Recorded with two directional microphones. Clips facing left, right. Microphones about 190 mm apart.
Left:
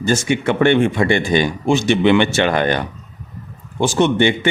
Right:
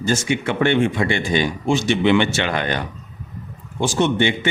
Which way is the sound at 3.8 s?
55° left (ahead or behind).